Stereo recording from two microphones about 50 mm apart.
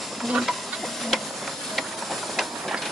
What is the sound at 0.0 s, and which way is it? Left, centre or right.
Stir, centre.